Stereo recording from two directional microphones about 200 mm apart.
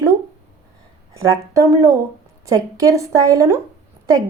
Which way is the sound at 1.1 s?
15° right (ahead or behind).